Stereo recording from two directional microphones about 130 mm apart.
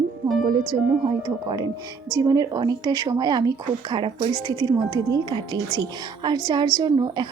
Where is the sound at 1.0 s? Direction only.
35° right (ahead or behind).